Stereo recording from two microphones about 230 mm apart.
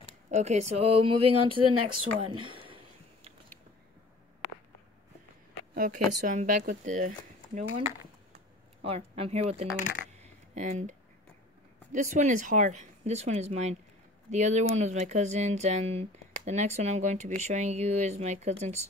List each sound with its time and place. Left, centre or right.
0.6 s speech: right
1.3 s speech: right
2.3 s a sound: right
5.8 s speech: right
8.8 s speech: right
10.2 s a sound: right
11.9 s speech: right